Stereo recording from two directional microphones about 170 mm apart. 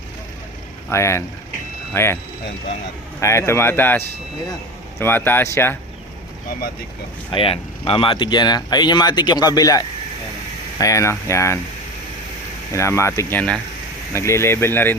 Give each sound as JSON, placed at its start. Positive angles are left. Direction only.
{"t": 0.9, "sound": "speech", "side_deg": 15}
{"t": 3.2, "sound": "speech", "side_deg": 15}
{"t": 7.3, "sound": "speech", "side_deg": 30}
{"t": 12.7, "sound": "speech", "side_deg": 15}